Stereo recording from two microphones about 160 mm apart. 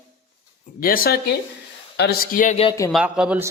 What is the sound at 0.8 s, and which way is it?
Speech, 65° left (ahead or behind).